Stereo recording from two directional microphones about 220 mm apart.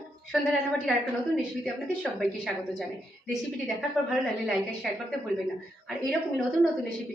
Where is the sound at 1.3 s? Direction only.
Centre (ahead or behind).